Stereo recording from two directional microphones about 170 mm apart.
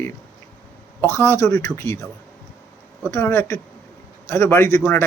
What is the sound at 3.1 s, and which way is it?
Speech, 15° left (ahead or behind).